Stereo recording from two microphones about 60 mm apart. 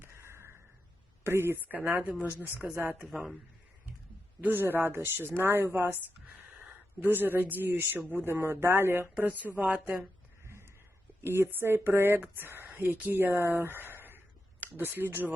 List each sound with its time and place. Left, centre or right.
0.0 s a sound: right
1.2 s speech: right
3.1 s a woman's voice: centre
4.4 s a woman's voice: right
6.2 s a sound: right
7.7 s a woman's voice: right
9.1 s speech: right
9.6 s a woman's voice: centre
10.4 s a sound: right
11.2 s a woman's voice: right